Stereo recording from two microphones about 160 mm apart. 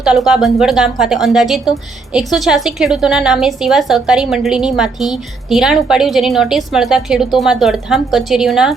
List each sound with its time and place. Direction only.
0.0 s a woman's voice: 5° right (ahead or behind)